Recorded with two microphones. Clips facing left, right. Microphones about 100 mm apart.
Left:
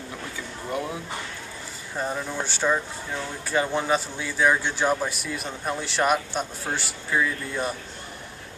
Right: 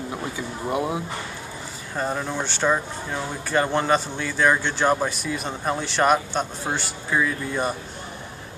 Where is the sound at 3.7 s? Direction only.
5° left (ahead or behind).